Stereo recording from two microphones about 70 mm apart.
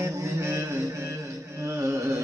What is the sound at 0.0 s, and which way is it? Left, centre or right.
Music, right.